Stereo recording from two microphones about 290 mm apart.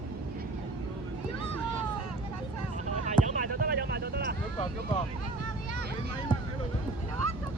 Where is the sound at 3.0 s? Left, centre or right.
Right.